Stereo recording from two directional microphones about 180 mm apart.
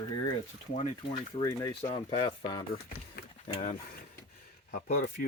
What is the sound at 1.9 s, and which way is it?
Speech, 30° left (ahead or behind).